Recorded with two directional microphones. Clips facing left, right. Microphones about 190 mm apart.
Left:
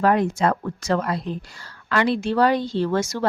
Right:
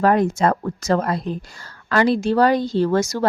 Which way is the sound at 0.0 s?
45° right (ahead or behind).